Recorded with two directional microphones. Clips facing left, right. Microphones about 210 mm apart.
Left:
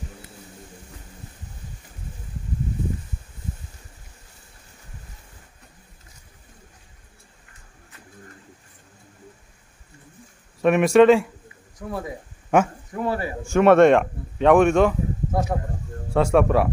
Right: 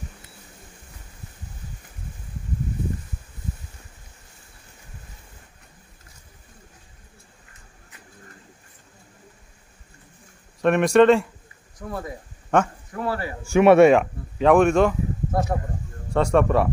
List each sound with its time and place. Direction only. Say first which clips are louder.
10.6 s speech: left 1 dB; 5° left (ahead or behind)
12.4 s a man's voice: left 2 dB; 10° left (ahead or behind)
13.5 s speech: right 1 dB; 10° right (ahead or behind)